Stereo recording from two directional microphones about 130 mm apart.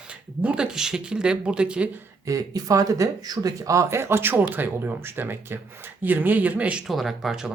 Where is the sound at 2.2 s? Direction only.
25° right (ahead or behind).